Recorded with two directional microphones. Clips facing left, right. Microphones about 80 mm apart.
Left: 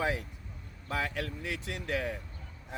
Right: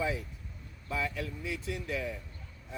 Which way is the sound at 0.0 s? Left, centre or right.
Left.